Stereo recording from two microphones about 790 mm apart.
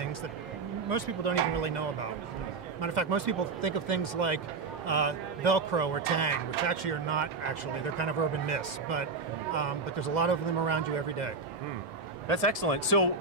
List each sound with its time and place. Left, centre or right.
0.8 s speech: right
12.3 s speech: right